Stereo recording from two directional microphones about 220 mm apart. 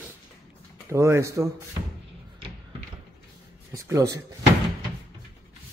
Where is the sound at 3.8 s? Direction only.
15° right (ahead or behind).